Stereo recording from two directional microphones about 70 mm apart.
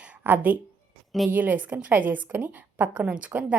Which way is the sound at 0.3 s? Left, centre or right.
Right.